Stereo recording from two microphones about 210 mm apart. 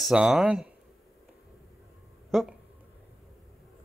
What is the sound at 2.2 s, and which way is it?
Speech, centre (ahead or behind).